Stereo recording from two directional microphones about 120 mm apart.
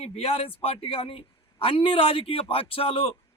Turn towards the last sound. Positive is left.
turn(degrees=55)  # may be behind; listen again after turning